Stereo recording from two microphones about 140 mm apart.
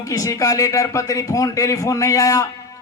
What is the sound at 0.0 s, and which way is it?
A man's voice, 25° left (ahead or behind).